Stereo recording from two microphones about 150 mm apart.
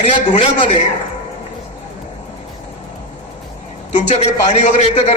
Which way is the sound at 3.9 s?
50° left (ahead or behind).